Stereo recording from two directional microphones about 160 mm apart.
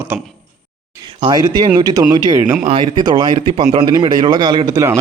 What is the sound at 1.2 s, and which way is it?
Speech, 25° right (ahead or behind).